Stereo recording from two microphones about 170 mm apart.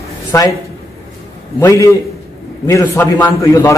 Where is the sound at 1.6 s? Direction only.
15° left (ahead or behind).